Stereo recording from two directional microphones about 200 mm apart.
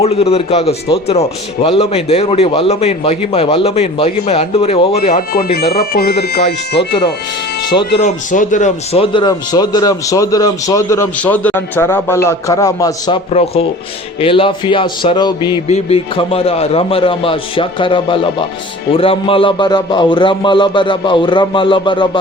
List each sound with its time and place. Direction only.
0.0 s a man's voice: 30° left (ahead or behind); by 6.1 s 50° left (ahead or behind)
8.0 s speech: 40° left (ahead or behind); by 13.1 s 15° left (ahead or behind)
13.3 s a man's voice: 30° left (ahead or behind)